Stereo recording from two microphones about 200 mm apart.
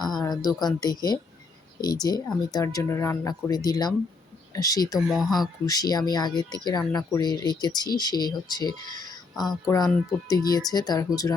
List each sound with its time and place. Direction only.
0.2 s speech: 20° left (ahead or behind)
4.9 s speech: centre (ahead or behind)
5.4 s speech: 20° left (ahead or behind)